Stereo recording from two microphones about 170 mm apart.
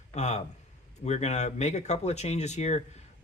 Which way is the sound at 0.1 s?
40° left (ahead or behind).